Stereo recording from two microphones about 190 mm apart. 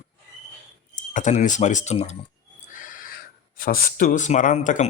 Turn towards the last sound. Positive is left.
turn(degrees=40)  # may be behind; listen again after turning